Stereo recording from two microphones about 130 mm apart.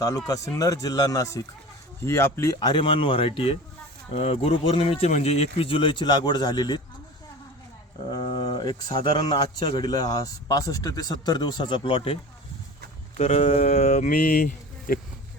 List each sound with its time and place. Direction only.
0.3 s speech: 25° left (ahead or behind)
2.6 s speech: 35° left (ahead or behind)
8.1 s a man's voice: 35° left (ahead or behind); by 14.9 s 75° left (ahead or behind)